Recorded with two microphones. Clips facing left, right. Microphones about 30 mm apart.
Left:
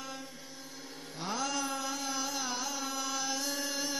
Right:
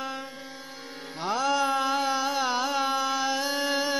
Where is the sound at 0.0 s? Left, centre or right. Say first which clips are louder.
Right 9 dB; right.